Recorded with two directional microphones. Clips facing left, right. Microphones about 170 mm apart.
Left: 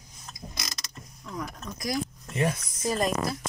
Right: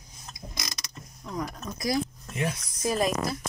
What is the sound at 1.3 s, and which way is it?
Speech, 30° right (ahead or behind).